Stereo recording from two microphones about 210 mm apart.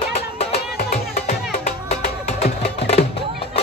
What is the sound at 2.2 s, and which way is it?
Music, 30° left (ahead or behind).